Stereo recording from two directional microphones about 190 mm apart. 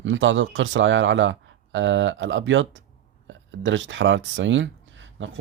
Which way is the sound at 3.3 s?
80° right.